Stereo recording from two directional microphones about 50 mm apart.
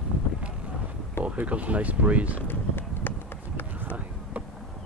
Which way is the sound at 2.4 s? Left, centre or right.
Left.